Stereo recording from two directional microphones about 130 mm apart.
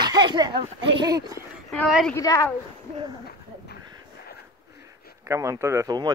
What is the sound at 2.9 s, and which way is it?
Speech, 40° right (ahead or behind).